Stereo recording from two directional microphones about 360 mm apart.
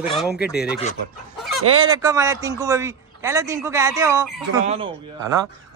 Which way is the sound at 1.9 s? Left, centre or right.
Centre.